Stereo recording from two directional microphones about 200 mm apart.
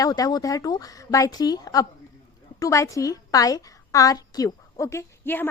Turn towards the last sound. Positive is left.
turn(degrees=10)  # may be behind; listen again after turning